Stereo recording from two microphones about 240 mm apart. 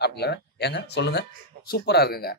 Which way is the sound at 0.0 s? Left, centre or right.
Left.